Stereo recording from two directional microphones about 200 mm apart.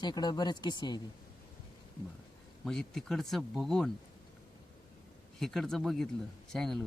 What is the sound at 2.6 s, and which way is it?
Speech, centre (ahead or behind).